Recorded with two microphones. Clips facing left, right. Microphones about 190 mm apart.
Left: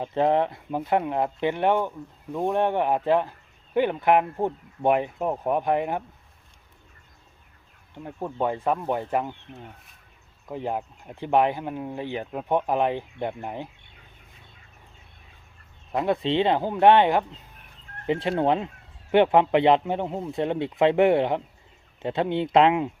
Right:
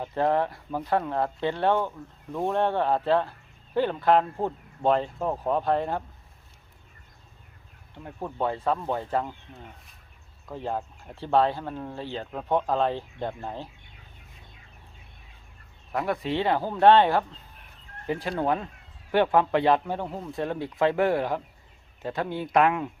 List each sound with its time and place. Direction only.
0.0 s speech: 20° left (ahead or behind)
7.9 s speech: 15° left (ahead or behind)
10.5 s speech: 15° left (ahead or behind)
15.9 s speech: 20° left (ahead or behind)